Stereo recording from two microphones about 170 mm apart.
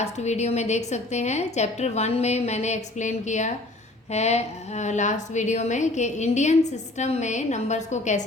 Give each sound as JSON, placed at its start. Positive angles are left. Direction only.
{"t": 0.0, "sound": "a woman's voice", "side_deg": 40}